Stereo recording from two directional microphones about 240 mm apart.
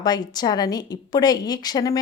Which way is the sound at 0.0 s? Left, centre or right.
Centre.